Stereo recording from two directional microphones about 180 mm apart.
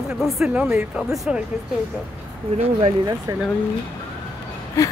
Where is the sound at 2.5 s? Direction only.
35° right (ahead or behind).